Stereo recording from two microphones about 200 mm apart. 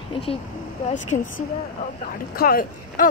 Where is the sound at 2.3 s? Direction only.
50° left (ahead or behind).